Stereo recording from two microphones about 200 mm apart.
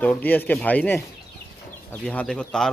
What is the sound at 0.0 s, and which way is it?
A man's voice, 10° left (ahead or behind).